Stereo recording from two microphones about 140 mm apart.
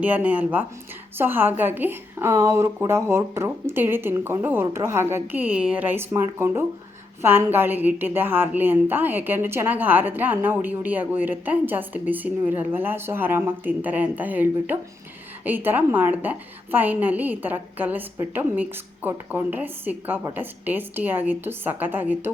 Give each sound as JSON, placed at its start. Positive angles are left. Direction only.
{"t": 0.0, "sound": "a woman's voice", "side_deg": -10}